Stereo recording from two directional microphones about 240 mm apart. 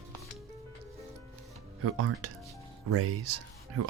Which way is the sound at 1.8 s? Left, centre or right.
Right.